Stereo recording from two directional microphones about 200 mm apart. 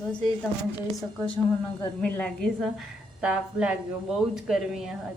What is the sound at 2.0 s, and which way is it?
A woman's voice, 5° left (ahead or behind).